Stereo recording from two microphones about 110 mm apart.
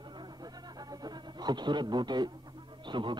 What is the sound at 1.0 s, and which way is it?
Speech, 40° right (ahead or behind).